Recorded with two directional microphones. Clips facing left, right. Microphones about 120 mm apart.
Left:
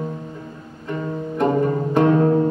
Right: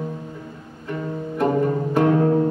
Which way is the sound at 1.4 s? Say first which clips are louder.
Left 1 dB; 20° left (ahead or behind).